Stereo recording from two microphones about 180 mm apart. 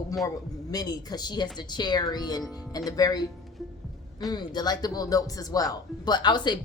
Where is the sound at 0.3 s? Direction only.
20° left (ahead or behind).